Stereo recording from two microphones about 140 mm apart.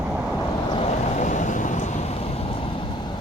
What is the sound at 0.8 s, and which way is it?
Vehicle, 55° left (ahead or behind).